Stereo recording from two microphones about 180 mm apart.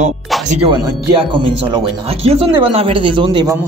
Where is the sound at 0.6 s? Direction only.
25° right (ahead or behind).